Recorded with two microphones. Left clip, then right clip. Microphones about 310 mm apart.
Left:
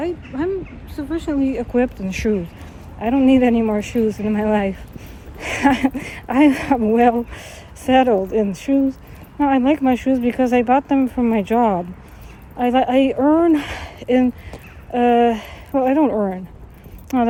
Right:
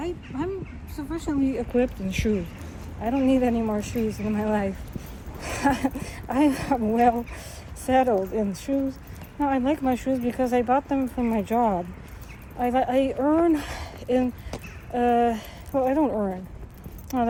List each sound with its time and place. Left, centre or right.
0.0 s a sound: centre
0.9 s speech: centre
1.7 s speech: centre